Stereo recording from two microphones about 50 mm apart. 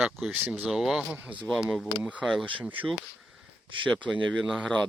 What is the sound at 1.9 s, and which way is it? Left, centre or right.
Speech, left.